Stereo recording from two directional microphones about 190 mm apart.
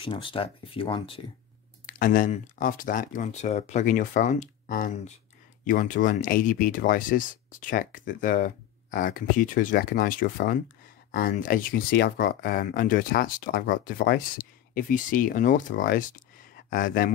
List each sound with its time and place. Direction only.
0.0 s speech: 25° left (ahead or behind)
1.9 s speech: 45° left (ahead or behind)